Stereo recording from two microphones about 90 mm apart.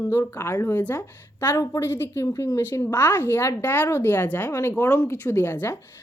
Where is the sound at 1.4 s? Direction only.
35° left (ahead or behind).